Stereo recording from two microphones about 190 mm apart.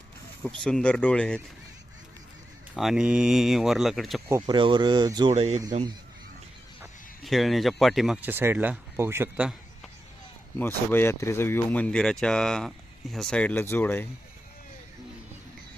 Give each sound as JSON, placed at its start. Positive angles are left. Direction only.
{"t": 0.6, "sound": "speech", "side_deg": 5}
{"t": 2.7, "sound": "speech", "side_deg": -5}
{"t": 4.3, "sound": "speech", "side_deg": -20}
{"t": 5.3, "sound": "speech", "side_deg": -35}
{"t": 7.3, "sound": "speech", "side_deg": 0}
{"t": 10.6, "sound": "speech", "side_deg": 10}